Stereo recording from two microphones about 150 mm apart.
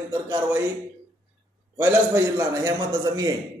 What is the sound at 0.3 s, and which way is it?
Speech, 20° right (ahead or behind).